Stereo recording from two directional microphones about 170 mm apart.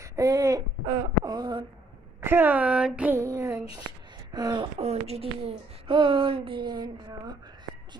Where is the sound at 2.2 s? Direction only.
10° right (ahead or behind).